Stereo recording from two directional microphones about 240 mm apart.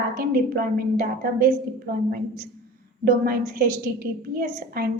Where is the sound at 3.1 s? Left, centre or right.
Right.